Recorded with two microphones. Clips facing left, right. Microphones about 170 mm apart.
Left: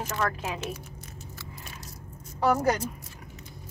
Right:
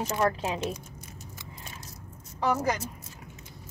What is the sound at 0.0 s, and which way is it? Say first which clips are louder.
Speech: right 3 dB; 15° right (ahead or behind).